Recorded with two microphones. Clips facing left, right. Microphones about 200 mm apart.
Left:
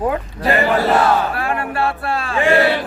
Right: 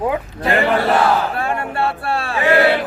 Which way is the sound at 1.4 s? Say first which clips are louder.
Even; 25° right (ahead or behind).